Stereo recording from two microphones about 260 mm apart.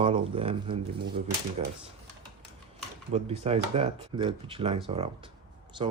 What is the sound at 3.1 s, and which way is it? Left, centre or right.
Speech, right.